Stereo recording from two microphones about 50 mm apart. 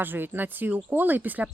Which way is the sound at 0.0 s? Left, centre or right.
Right.